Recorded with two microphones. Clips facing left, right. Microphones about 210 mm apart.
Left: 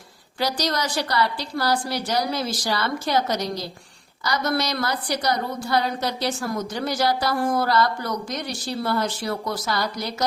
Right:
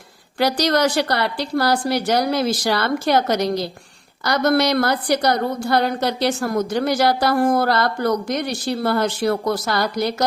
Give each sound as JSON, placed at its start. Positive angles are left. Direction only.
{"t": 0.3, "sound": "a woman's voice", "side_deg": -65}